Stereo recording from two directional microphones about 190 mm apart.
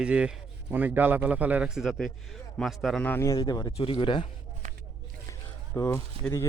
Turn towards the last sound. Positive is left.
turn(degrees=15)  # may be behind; listen again after turning